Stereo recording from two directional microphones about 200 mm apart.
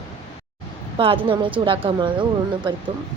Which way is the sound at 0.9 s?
25° right (ahead or behind).